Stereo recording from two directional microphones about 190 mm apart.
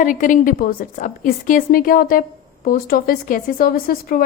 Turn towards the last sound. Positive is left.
turn(degrees=50)  # may be behind; listen again after turning